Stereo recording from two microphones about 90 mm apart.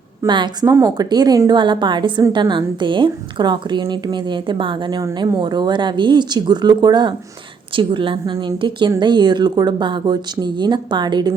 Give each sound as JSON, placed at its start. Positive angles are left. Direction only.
{"t": 0.2, "sound": "a woman's voice", "side_deg": -30}
{"t": 1.5, "sound": "a woman's voice", "side_deg": -60}
{"t": 7.8, "sound": "a woman's voice", "side_deg": -65}